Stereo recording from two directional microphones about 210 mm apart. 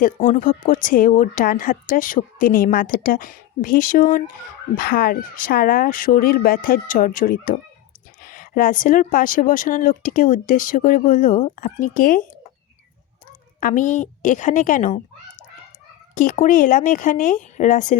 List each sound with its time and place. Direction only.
0.0 s a woman's voice: 40° left (ahead or behind)
13.6 s a woman's voice: 40° left (ahead or behind)
16.1 s a woman's voice: 35° left (ahead or behind)